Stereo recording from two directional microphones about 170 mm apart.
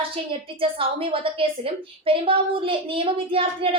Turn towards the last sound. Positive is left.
turn(degrees=-30)  # may be behind; listen again after turning